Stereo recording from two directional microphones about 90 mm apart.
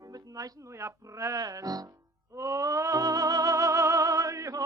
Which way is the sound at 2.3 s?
35° right (ahead or behind).